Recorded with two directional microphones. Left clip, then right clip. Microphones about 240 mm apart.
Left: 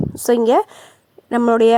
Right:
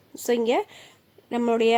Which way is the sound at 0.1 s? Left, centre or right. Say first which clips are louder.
Left 8 dB; left.